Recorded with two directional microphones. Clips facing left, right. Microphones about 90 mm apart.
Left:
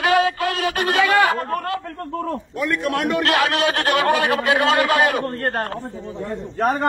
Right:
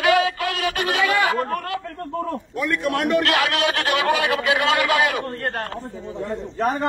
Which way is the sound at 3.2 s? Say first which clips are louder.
Left 1 dB; 35° left (ahead or behind).